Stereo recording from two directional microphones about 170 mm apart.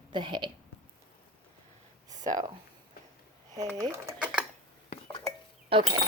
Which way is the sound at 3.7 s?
20° right (ahead or behind).